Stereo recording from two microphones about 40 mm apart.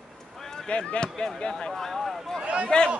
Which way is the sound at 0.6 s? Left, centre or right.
Left.